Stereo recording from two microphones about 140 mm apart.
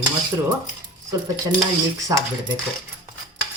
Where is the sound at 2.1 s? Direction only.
25° right (ahead or behind).